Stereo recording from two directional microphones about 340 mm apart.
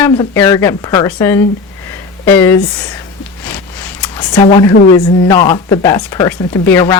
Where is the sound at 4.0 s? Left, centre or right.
Centre.